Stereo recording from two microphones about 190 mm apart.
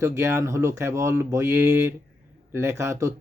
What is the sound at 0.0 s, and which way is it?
Speech, 15° right (ahead or behind).